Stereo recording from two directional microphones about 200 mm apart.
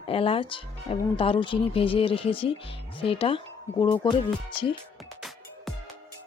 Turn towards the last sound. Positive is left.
turn(degrees=0)  # may be behind; listen again after turning